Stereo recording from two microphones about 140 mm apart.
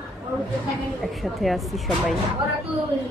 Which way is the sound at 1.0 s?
Centre (ahead or behind).